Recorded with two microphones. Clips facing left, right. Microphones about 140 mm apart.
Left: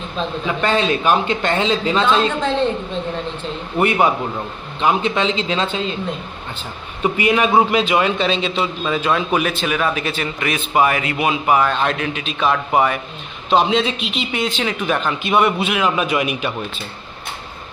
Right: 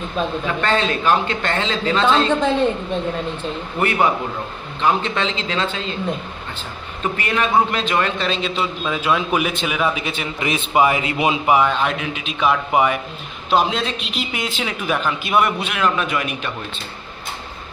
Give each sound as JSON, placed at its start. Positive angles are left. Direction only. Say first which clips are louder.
{"t": 0.6, "sound": "speech", "louder": "left 3 dB", "side_deg": 20}
{"t": 3.8, "sound": "speech", "louder": "left 2 dB", "side_deg": 20}
{"t": 7.0, "sound": "a man's voice", "louder": "left 5 dB", "side_deg": 15}